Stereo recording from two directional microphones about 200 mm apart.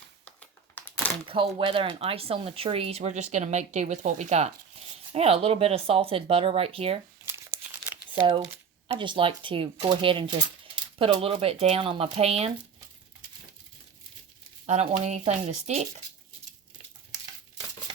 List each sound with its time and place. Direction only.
0.3 s a sound: 10° left (ahead or behind)
1.3 s speech: 25° right (ahead or behind)
9.0 s speech: 25° right (ahead or behind)
14.7 s speech: 35° right (ahead or behind)